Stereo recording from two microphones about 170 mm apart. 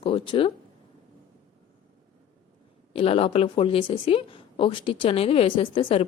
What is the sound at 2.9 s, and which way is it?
A woman's voice, 35° left (ahead or behind).